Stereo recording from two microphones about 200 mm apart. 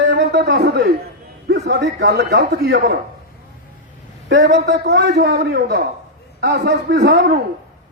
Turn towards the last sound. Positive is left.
turn(degrees=-55)  # may be behind; listen again after turning